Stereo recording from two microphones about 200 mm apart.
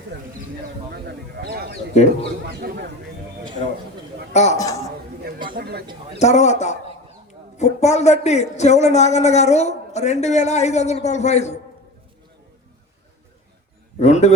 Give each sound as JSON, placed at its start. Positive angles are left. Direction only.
{"t": 0.1, "sound": "a sound", "side_deg": -60}
{"t": 1.0, "sound": "speech", "side_deg": -50}
{"t": 4.3, "sound": "a man's voice", "side_deg": 35}
{"t": 4.5, "sound": "a man's voice", "side_deg": 15}
{"t": 5.5, "sound": "speech", "side_deg": -50}
{"t": 6.1, "sound": "a man's voice", "side_deg": 35}
{"t": 14.0, "sound": "a man's voice", "side_deg": 35}